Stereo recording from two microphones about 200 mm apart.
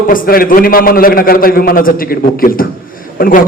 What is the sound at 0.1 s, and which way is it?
A man's voice, 45° left (ahead or behind).